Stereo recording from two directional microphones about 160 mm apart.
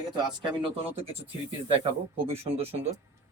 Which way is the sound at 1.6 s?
35° right (ahead or behind).